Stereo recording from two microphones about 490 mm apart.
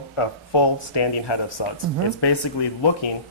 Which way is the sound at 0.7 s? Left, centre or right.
Left.